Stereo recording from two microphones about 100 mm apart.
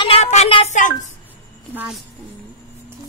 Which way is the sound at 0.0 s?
85° left.